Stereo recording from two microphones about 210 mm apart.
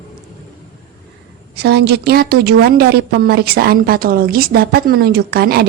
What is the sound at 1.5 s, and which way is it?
A woman's voice, 50° right (ahead or behind).